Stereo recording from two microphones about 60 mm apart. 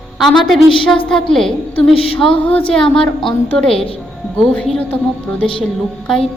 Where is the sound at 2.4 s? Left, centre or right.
Left.